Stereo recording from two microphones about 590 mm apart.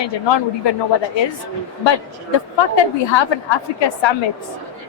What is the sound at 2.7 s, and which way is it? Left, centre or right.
A woman's voice, left.